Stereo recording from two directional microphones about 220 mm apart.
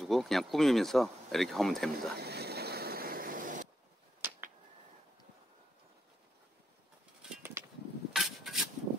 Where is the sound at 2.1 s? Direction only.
45° right (ahead or behind).